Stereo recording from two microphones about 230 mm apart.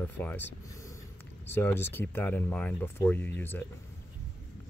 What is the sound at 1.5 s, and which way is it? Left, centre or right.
Speech, centre.